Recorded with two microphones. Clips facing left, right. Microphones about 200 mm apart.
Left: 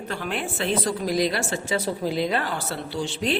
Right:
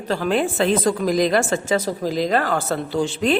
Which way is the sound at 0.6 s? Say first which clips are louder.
Right 6 dB; 90° right.